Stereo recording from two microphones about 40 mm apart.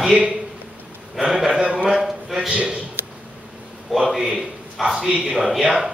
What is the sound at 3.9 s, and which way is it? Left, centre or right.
A man's voice, centre.